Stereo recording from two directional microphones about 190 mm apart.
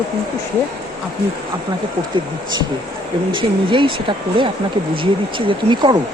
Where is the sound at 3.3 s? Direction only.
25° right (ahead or behind).